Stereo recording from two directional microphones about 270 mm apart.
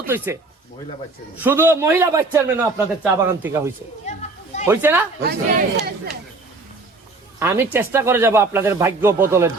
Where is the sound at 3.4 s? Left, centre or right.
Centre.